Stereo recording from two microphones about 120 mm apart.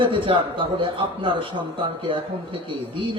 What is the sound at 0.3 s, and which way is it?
A man's voice, 45° right (ahead or behind).